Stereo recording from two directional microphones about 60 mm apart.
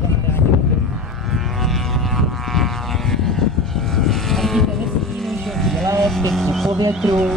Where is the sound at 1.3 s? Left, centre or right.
Centre.